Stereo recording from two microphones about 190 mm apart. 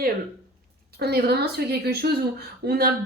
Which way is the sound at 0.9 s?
55° right (ahead or behind).